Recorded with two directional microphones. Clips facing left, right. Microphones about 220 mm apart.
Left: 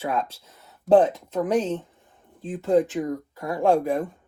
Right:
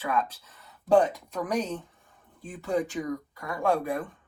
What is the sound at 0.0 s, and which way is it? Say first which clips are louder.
Speech: left 2 dB; 25° left (ahead or behind).